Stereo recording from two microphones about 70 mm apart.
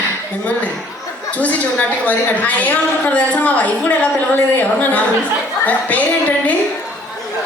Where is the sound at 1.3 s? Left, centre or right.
Left.